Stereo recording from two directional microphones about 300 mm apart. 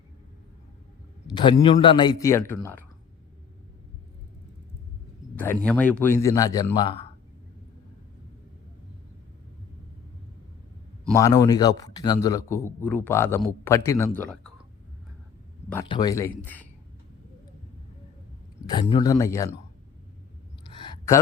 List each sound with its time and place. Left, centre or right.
1.3 s a man's voice: centre
5.4 s a man's voice: centre
11.0 s a man's voice: centre
15.7 s a man's voice: centre
18.7 s a man's voice: centre
20.7 s a sound: centre